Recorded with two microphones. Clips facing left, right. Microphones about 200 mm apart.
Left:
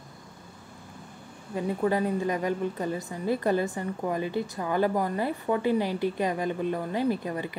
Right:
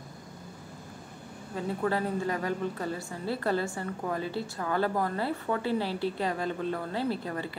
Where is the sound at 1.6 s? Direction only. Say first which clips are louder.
Left 4 dB; 15° left (ahead or behind).